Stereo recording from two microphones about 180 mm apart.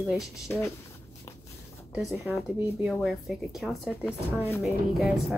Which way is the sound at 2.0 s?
Centre (ahead or behind).